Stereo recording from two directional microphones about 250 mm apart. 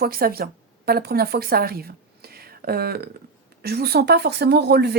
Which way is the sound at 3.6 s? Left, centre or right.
Right.